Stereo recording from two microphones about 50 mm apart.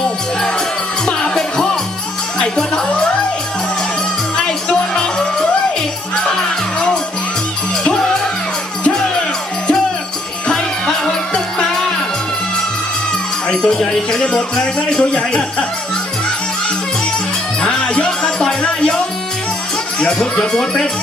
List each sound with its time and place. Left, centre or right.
1.0 s music: centre
4.4 s music: centre
6.7 s music: centre
10.4 s music: centre
13.5 s speech: centre
14.2 s speech: centre
17.6 s music: centre
20.0 s music: centre
20.5 s speech: centre